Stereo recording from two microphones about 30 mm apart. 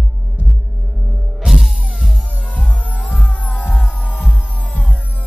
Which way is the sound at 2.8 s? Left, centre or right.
Left.